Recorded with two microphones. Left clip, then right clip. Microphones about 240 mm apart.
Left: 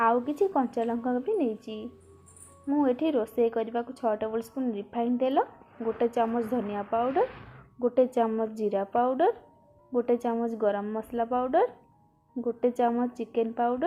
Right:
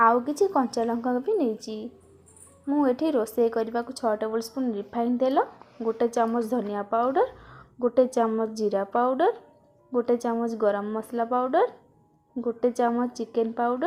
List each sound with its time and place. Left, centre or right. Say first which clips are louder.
0.0 s a woman's voice: right 4 dB; right
2.6 s a woman's voice: right 2 dB; right